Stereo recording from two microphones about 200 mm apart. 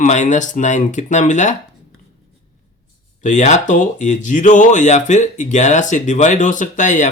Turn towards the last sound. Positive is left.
turn(degrees=40)  # may be behind; listen again after turning